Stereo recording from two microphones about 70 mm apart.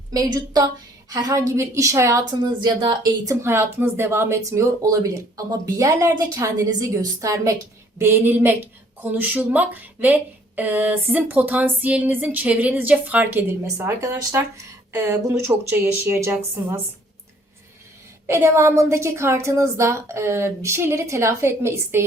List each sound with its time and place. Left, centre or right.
0.1 s a woman's voice: right
1.1 s a woman's voice: right
1.4 s speech: right
2.3 s speech: right
3.4 s speech: right
7.9 s speech: right
13.7 s speech: right
18.3 s speech: right